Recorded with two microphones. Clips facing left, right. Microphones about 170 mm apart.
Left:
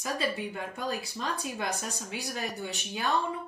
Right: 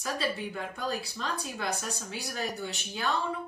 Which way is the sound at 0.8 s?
15° left (ahead or behind).